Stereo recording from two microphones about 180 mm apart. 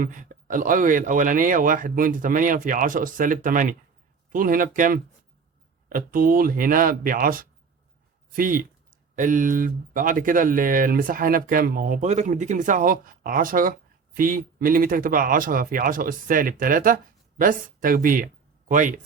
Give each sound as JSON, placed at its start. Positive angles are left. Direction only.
{"t": 0.0, "sound": "speech", "side_deg": -45}